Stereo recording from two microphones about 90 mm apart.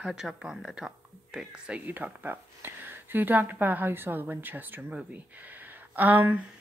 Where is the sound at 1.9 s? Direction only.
20° right (ahead or behind).